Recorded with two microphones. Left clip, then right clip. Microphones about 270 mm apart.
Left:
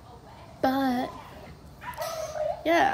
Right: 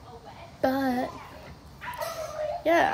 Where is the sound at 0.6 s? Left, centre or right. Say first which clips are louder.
Even; centre.